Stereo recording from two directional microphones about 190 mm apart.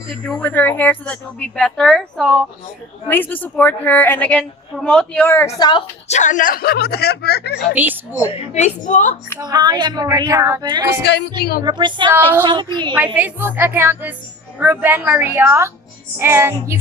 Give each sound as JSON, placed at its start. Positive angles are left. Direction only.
{"t": 0.1, "sound": "a woman's voice", "side_deg": 0}
{"t": 6.1, "sound": "speech", "side_deg": 40}
{"t": 7.7, "sound": "a woman's voice", "side_deg": -10}
{"t": 8.3, "sound": "a woman's voice", "side_deg": 35}
{"t": 9.4, "sound": "speech", "side_deg": -20}
{"t": 11.0, "sound": "speech", "side_deg": 60}
{"t": 11.6, "sound": "speech", "side_deg": -25}
{"t": 13.1, "sound": "a woman's voice", "side_deg": -10}